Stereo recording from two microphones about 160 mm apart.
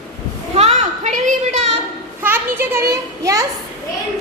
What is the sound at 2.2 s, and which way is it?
Children playing, 15° right (ahead or behind).